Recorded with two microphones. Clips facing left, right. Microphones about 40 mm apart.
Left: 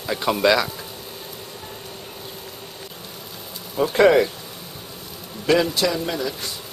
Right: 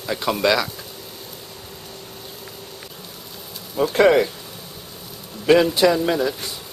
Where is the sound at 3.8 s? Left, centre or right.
Centre.